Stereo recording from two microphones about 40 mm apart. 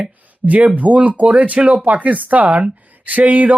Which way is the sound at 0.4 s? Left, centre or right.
Right.